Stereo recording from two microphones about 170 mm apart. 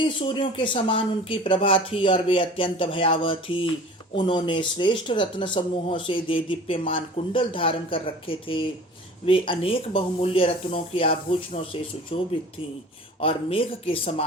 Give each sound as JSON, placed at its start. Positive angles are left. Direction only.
{"t": 0.0, "sound": "speech", "side_deg": 30}